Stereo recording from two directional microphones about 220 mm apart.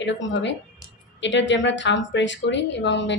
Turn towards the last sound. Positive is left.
turn(degrees=55)  # may be behind; listen again after turning